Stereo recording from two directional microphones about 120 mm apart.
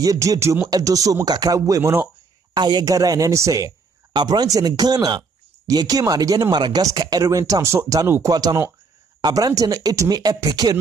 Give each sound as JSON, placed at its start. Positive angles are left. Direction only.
{"t": 0.0, "sound": "speech", "side_deg": -30}
{"t": 2.5, "sound": "speech", "side_deg": -35}